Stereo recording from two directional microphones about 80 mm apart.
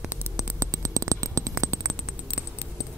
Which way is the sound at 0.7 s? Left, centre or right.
Right.